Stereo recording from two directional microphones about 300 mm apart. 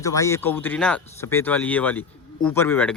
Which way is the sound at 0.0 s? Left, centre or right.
Centre.